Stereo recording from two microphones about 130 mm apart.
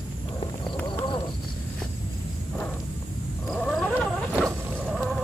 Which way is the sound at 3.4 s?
5° left (ahead or behind).